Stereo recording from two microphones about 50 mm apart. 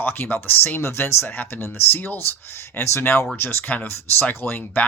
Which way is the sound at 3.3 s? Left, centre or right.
Left.